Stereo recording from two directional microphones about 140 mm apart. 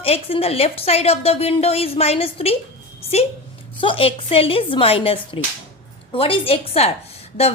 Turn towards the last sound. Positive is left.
turn(degrees=45)  # may be behind; listen again after turning